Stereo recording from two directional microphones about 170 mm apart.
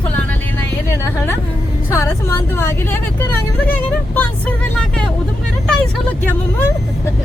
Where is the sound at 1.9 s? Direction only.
15° left (ahead or behind).